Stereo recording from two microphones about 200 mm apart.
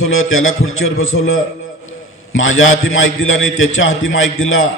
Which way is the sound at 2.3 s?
80° left.